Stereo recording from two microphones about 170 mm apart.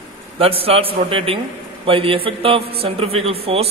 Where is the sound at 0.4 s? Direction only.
35° right (ahead or behind).